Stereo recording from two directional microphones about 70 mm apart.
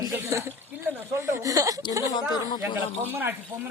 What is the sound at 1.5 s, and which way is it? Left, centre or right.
Speech, right.